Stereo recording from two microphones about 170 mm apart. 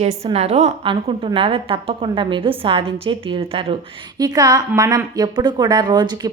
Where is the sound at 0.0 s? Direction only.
35° right (ahead or behind).